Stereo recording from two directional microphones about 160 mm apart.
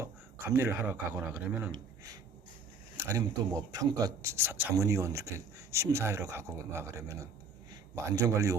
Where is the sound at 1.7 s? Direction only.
25° right (ahead or behind).